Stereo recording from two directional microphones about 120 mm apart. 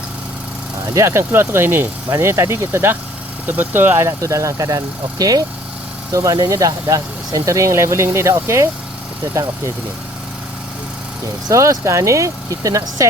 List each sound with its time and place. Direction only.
0.9 s speech: 20° right (ahead or behind)
11.4 s speech: 25° right (ahead or behind)